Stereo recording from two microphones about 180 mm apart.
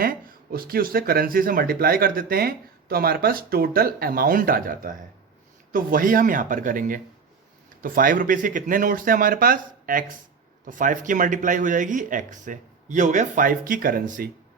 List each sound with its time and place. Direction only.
0.0 s speech: 55° right (ahead or behind)